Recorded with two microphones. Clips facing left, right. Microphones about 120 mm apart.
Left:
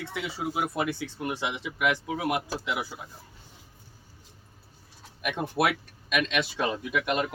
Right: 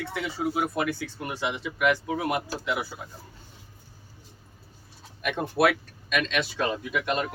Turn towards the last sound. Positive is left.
turn(degrees=15)  # may be behind; listen again after turning